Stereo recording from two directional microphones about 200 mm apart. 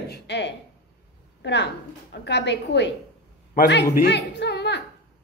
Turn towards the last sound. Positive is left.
turn(degrees=60)  # may be behind; listen again after turning